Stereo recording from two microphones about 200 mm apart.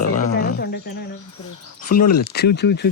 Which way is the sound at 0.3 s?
50° left (ahead or behind).